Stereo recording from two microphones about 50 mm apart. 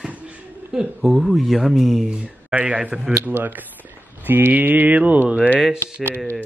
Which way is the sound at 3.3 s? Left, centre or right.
Right.